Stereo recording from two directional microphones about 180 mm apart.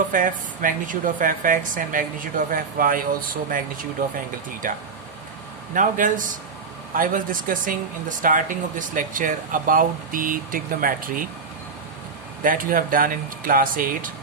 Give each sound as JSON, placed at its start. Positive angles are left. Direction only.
{"t": 0.1, "sound": "speech", "side_deg": -50}
{"t": 5.7, "sound": "speech", "side_deg": -45}
{"t": 12.4, "sound": "speech", "side_deg": -50}